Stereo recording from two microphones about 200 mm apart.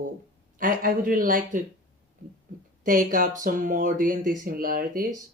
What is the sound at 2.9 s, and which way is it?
Speech, 45° right (ahead or behind).